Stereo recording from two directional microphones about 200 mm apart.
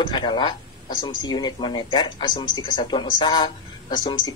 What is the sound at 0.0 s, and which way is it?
Speech, 20° left (ahead or behind).